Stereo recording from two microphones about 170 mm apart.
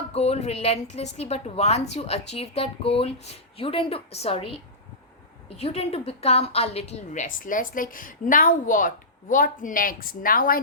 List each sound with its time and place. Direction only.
0.1 s a woman's voice: 35° left (ahead or behind); by 10.6 s 55° left (ahead or behind)